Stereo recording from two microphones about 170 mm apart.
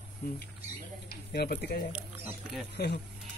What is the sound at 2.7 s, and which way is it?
Speech, 75° left (ahead or behind).